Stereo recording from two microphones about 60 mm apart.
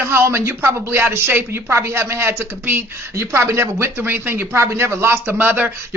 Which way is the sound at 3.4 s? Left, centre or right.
Right.